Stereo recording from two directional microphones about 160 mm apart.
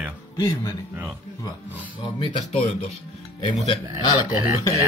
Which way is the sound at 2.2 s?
30° left (ahead or behind).